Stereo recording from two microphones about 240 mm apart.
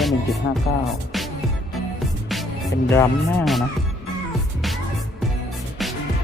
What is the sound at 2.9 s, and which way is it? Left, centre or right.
Speech, centre.